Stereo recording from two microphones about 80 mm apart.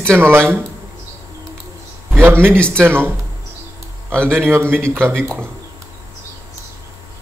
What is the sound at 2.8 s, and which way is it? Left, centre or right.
Speech, right.